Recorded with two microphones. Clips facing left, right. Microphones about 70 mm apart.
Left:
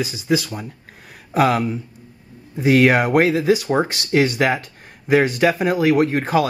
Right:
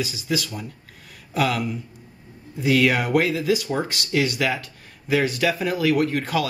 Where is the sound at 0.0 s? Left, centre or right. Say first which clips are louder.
Left 5 dB; left.